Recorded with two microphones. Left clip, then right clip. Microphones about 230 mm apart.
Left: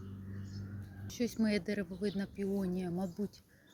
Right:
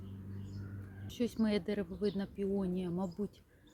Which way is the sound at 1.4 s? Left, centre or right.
Centre.